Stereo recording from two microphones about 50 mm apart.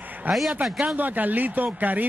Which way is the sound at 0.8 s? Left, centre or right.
Right.